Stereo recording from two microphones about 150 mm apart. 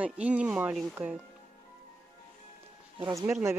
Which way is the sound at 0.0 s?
10° right (ahead or behind).